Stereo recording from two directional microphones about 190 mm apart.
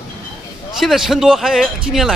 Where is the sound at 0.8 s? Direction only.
Centre (ahead or behind).